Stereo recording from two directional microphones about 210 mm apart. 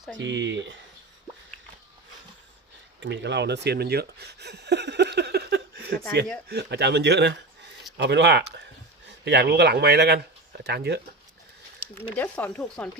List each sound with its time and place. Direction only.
0.2 s speech: 60° right (ahead or behind)
3.0 s a man's voice: 55° right (ahead or behind)
12.1 s speech: 5° left (ahead or behind)